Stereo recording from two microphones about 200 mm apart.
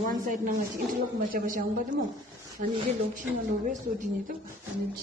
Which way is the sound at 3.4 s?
45° right (ahead or behind).